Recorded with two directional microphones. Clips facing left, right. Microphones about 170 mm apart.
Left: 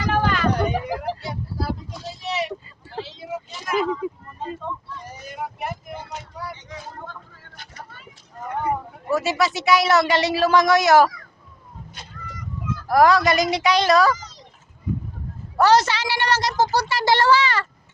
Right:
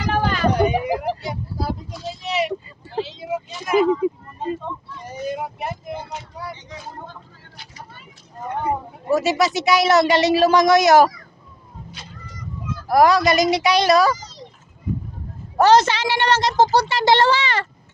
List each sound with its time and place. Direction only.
0.6 s a sound: 15° right (ahead or behind)
2.2 s vehicle: 20° right (ahead or behind)
7.5 s vehicle: 50° left (ahead or behind)
8.4 s a sound: 25° right (ahead or behind)
10.1 s a woman's voice: 20° right (ahead or behind)
12.9 s a woman's voice: 15° right (ahead or behind)
15.5 s a woman's voice: 25° right (ahead or behind)